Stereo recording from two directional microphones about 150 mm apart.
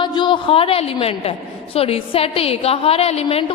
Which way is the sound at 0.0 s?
30° left (ahead or behind).